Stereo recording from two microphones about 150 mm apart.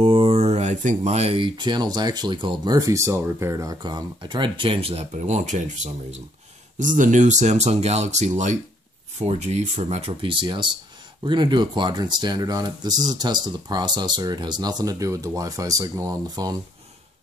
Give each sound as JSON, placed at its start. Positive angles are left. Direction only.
{"t": 0.0, "sound": "speech", "side_deg": -40}
{"t": 5.1, "sound": "speech", "side_deg": -50}